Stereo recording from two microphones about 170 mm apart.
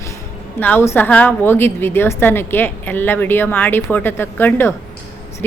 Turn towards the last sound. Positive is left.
turn(degrees=15)  # may be behind; listen again after turning